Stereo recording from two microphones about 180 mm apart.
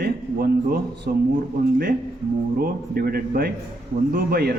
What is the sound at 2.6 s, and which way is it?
A man's voice, 55° right (ahead or behind).